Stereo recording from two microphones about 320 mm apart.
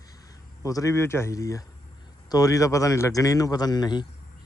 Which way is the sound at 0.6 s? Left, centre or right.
Centre.